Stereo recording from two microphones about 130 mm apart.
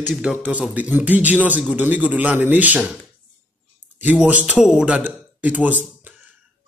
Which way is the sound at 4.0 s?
10° right (ahead or behind).